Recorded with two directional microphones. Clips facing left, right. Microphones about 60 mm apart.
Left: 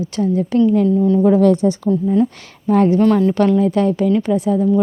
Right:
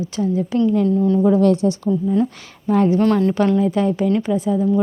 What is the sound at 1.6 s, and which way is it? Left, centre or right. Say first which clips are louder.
Speech: left 2 dB; left.